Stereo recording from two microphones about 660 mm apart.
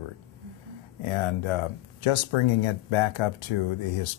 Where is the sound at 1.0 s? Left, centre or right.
Left.